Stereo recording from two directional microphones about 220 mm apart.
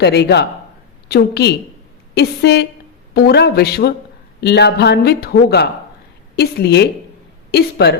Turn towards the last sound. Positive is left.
turn(degrees=50)  # may be behind; listen again after turning